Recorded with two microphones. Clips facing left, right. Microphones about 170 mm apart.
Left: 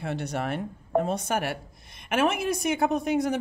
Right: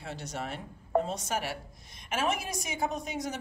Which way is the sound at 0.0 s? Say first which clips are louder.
Left 8 dB; 60° left (ahead or behind).